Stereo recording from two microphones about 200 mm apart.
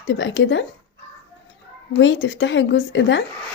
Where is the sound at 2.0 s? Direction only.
65° left (ahead or behind).